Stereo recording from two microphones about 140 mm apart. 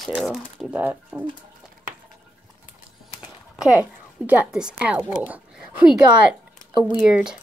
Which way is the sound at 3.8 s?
10° right (ahead or behind).